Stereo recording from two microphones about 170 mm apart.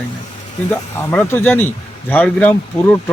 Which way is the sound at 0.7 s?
10° left (ahead or behind).